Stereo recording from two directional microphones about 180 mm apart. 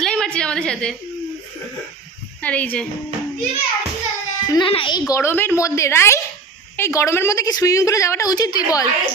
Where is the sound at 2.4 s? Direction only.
10° left (ahead or behind).